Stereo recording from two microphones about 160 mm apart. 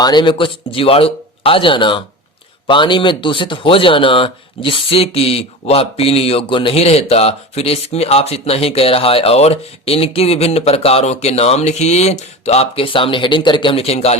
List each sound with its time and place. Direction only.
0.0 s speech: 25° left (ahead or behind)